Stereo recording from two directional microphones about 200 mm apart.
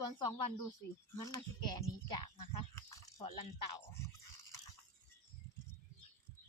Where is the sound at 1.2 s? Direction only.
20° left (ahead or behind).